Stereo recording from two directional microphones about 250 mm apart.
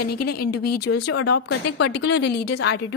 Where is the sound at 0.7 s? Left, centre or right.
Left.